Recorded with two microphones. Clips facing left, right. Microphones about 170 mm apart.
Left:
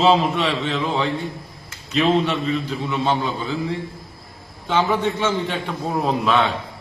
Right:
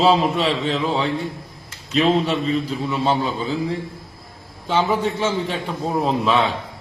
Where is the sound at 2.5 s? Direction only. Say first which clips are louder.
Right 1 dB; centre (ahead or behind).